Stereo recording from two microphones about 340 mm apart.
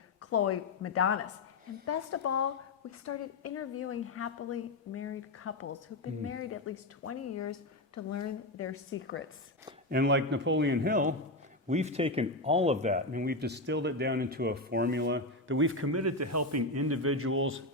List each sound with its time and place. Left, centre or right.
0.2 s a woman's voice: left
9.9 s speech: right